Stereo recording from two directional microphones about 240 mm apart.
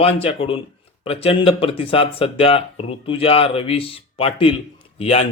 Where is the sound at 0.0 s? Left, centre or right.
Left.